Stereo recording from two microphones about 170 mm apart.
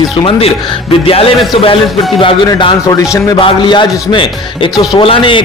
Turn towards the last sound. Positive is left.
turn(degrees=30)  # may be behind; listen again after turning